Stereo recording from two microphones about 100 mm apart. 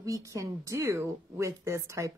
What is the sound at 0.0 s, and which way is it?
A woman's voice, 35° right (ahead or behind).